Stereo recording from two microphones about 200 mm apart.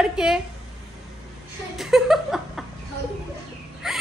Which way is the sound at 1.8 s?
Centre (ahead or behind).